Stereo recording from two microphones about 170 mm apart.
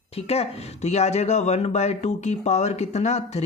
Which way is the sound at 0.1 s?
35° left (ahead or behind).